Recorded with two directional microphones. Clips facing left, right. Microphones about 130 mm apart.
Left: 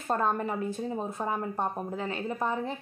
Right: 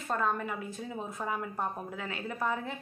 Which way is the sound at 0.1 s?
35° left (ahead or behind).